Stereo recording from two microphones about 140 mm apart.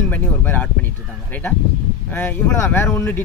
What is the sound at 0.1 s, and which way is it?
Speech, 10° left (ahead or behind).